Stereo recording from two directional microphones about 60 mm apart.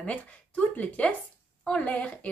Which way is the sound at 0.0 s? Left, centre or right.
Left.